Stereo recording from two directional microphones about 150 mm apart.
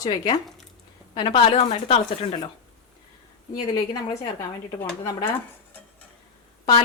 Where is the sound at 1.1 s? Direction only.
30° left (ahead or behind).